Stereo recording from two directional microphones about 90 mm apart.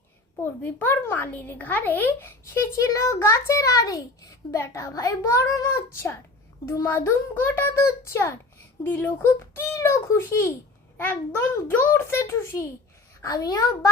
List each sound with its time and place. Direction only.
0.4 s a child's voice: 25° left (ahead or behind)
10.9 s a child's voice: 20° left (ahead or behind)
13.2 s a child's voice: 45° left (ahead or behind)